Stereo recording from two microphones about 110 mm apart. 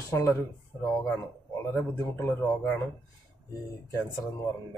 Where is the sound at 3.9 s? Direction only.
25° left (ahead or behind).